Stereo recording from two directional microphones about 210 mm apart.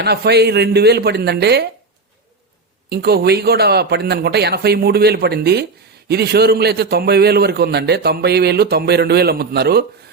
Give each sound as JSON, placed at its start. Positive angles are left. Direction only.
{"t": 0.0, "sound": "a man's voice", "side_deg": -50}
{"t": 2.9, "sound": "a man's voice", "side_deg": -50}